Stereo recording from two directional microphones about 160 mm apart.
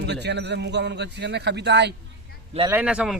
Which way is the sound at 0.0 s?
90° right.